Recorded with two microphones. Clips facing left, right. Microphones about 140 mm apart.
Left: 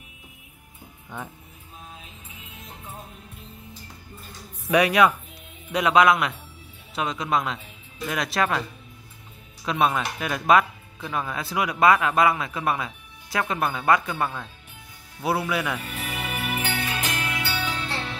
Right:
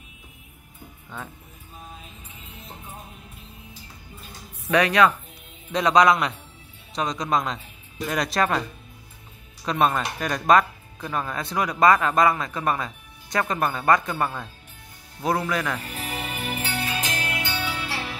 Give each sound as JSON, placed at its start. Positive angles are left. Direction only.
{"t": 4.6, "sound": "speech", "side_deg": 10}
{"t": 9.7, "sound": "speech", "side_deg": 5}
{"t": 15.2, "sound": "speech", "side_deg": 10}
{"t": 16.0, "sound": "music", "side_deg": 70}
{"t": 17.4, "sound": "music", "side_deg": -15}